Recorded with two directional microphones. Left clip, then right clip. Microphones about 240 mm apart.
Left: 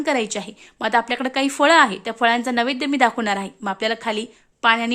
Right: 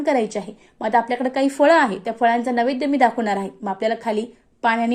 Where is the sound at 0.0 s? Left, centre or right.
Centre.